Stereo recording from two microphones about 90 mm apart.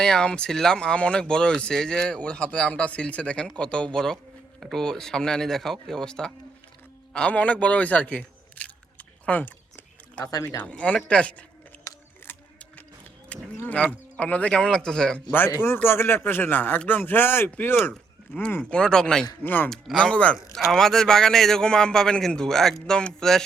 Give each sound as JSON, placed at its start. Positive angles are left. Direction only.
{"t": 0.0, "sound": "a man's voice", "side_deg": 10}
{"t": 7.1, "sound": "a sound", "side_deg": 15}
{"t": 10.6, "sound": "speech", "side_deg": 15}
{"t": 12.2, "sound": "mechanisms", "side_deg": 25}
{"t": 13.3, "sound": "livestock", "side_deg": 15}
{"t": 13.8, "sound": "speech", "side_deg": 15}
{"t": 15.3, "sound": "a man's voice", "side_deg": 25}
{"t": 18.6, "sound": "speech", "side_deg": 10}
{"t": 19.4, "sound": "a man's voice", "side_deg": 20}